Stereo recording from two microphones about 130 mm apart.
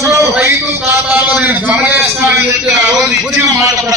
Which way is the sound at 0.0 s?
25° right (ahead or behind).